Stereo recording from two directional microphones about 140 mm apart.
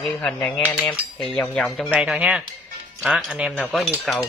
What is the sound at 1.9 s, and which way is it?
Cutlery, 10° right (ahead or behind).